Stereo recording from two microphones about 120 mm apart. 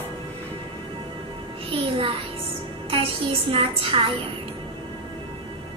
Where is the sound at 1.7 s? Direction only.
50° right (ahead or behind).